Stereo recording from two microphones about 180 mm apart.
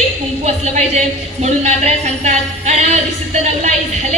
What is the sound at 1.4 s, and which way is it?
Music, 40° right (ahead or behind).